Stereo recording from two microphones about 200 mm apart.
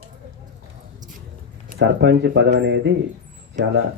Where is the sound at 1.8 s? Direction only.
60° right (ahead or behind).